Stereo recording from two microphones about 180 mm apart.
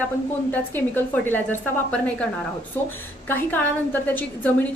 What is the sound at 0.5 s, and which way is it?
A woman's voice, 10° left (ahead or behind).